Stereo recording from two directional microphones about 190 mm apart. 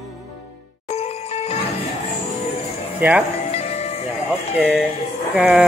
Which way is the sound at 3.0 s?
10° right (ahead or behind).